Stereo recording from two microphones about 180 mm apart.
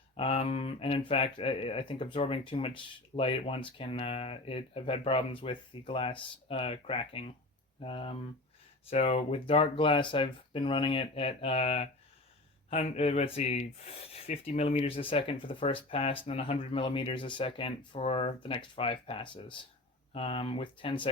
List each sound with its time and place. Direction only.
0.2 s speech: 30° left (ahead or behind)